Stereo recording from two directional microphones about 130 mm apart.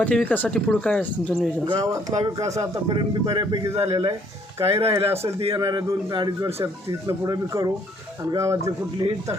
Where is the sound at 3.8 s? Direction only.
50° right (ahead or behind).